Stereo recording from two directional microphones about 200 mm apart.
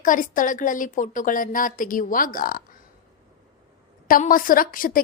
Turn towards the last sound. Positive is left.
turn(degrees=45)  # may be behind; listen again after turning